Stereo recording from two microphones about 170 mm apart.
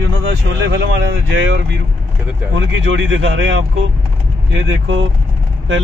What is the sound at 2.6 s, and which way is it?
Speech, 90° right.